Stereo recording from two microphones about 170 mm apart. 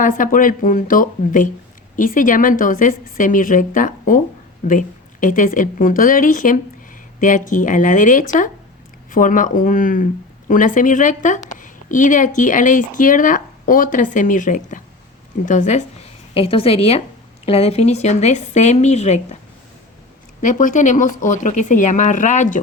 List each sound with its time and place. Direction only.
0.0 s a woman's voice: 50° left (ahead or behind)
16.3 s a woman's voice: 35° left (ahead or behind)
20.4 s a woman's voice: 50° left (ahead or behind)